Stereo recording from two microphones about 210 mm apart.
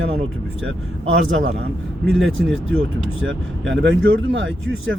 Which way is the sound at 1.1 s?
65° right (ahead or behind).